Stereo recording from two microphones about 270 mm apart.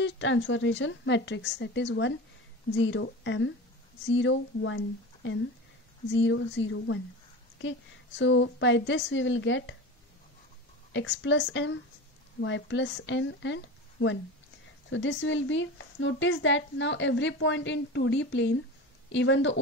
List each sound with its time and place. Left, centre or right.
0.0 s speech: left
8.2 s speech: left
10.9 s a woman's voice: left